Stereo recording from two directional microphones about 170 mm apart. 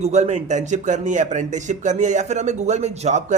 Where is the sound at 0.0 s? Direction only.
40° right (ahead or behind).